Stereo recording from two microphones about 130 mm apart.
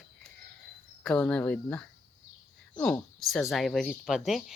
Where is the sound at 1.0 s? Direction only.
10° left (ahead or behind).